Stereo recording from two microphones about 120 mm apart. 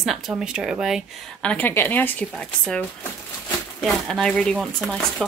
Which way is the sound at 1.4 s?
15° left (ahead or behind).